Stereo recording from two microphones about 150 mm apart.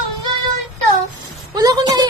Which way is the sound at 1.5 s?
25° right (ahead or behind).